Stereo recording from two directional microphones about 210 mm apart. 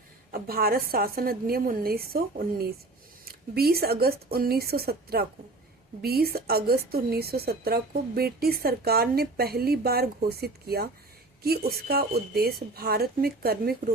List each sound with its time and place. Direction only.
0.3 s a woman's voice: 45° right (ahead or behind)